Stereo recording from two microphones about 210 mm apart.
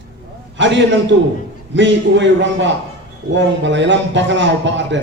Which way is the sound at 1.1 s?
60° right (ahead or behind).